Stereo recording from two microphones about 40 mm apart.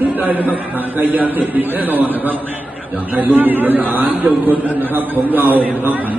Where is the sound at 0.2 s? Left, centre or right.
Right.